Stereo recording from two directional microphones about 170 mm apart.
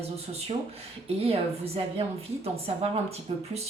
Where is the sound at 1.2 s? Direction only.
35° right (ahead or behind).